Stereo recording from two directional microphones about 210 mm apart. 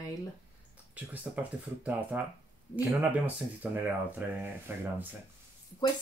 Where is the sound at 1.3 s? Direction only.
Centre (ahead or behind).